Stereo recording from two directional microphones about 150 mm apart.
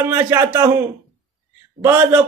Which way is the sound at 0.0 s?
20° right (ahead or behind).